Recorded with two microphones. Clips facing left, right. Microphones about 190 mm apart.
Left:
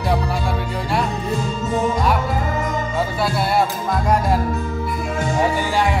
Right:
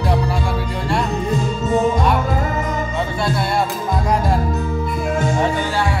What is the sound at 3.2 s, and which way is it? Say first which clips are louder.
Music: left 1 dB; 5° left (ahead or behind).